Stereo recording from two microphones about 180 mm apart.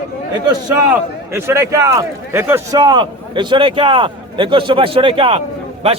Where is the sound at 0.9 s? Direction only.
15° right (ahead or behind).